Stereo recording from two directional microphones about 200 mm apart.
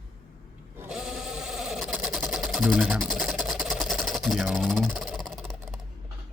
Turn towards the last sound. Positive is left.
turn(degrees=0)  # may be behind; listen again after turning